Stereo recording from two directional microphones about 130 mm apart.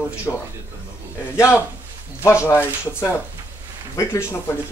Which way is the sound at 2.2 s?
20° left (ahead or behind).